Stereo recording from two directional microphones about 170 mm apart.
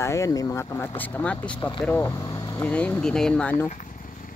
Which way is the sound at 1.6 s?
25° left (ahead or behind).